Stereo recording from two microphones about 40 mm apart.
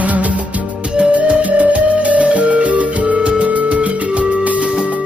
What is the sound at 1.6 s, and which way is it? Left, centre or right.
Music, right.